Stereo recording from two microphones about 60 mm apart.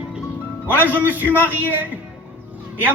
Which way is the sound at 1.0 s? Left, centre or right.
Right.